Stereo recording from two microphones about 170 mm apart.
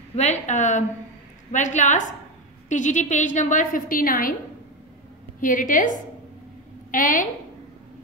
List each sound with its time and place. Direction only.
0.1 s a woman's voice: 40° left (ahead or behind); by 4.4 s 55° left (ahead or behind)
5.4 s a woman's voice: 50° left (ahead or behind)
6.9 s a woman's voice: 50° left (ahead or behind)